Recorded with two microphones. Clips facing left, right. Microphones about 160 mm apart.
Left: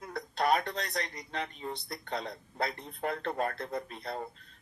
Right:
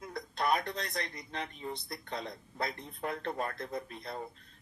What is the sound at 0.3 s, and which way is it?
Speech, 35° left (ahead or behind).